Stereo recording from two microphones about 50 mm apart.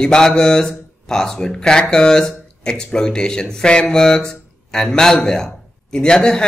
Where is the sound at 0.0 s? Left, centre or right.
Centre.